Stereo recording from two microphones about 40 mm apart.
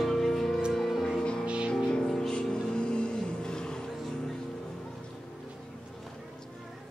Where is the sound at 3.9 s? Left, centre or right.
Centre.